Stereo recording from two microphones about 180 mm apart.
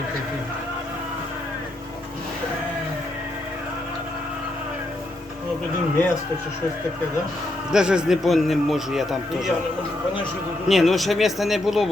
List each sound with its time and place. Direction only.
7.7 s speech: 5° right (ahead or behind)
10.7 s speech: centre (ahead or behind)